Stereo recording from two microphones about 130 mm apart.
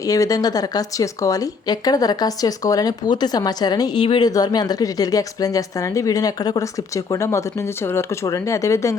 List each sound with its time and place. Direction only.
0.0 s a woman's voice: 25° left (ahead or behind)
4.3 s a woman's voice: 30° left (ahead or behind)